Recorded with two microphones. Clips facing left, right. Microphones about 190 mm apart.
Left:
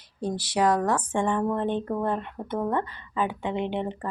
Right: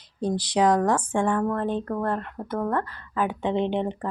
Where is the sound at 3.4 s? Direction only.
20° right (ahead or behind).